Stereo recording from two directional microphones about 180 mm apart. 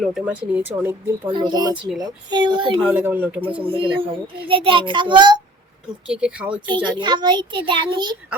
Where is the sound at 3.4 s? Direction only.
30° right (ahead or behind).